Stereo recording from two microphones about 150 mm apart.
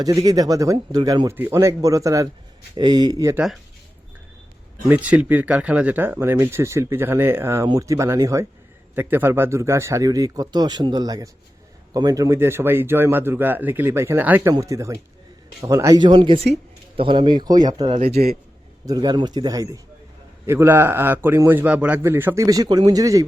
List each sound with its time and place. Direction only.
0.0 s speech: 25° right (ahead or behind)
4.9 s speech: 10° right (ahead or behind); by 18.0 s 30° right (ahead or behind)
18.0 s a man's voice: 90° right
18.9 s speech: 25° right (ahead or behind)